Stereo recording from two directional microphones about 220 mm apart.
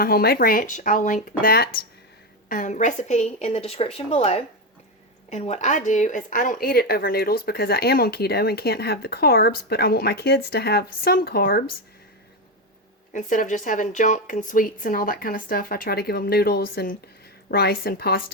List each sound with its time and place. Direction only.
0.0 s a woman's voice: 45° left (ahead or behind)
13.1 s speech: 35° left (ahead or behind)